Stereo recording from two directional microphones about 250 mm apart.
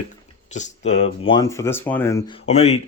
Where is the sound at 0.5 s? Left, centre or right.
Left; by 2.4 s centre.